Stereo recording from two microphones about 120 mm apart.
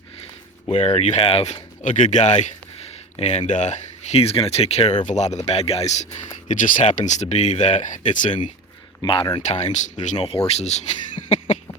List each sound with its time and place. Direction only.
0.7 s speech: 60° left (ahead or behind)
1.8 s speech: 90° left; by 4.9 s 60° left (ahead or behind)
5.0 s speech: 70° left (ahead or behind)
5.5 s speech: 60° left (ahead or behind)
6.5 s speech: 90° left
7.0 s speech: 75° left (ahead or behind)
9.0 s speech: 40° left (ahead or behind)
9.4 s speech: 70° left (ahead or behind)
10.2 s speech: 55° left (ahead or behind)
11.3 s cough: 70° left (ahead or behind)